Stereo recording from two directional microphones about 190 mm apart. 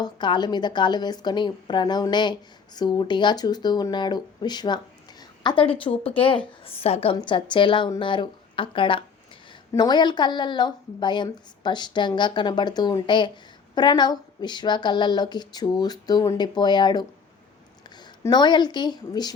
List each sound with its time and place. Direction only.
0.0 s a woman's voice: 25° left (ahead or behind)
18.2 s a woman's voice: 25° left (ahead or behind)